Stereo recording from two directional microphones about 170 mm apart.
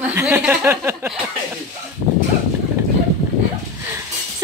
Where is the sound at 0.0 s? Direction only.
10° right (ahead or behind).